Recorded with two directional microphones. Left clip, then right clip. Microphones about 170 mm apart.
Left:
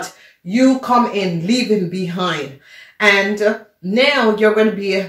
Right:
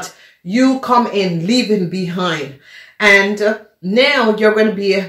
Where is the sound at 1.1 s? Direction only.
45° right (ahead or behind).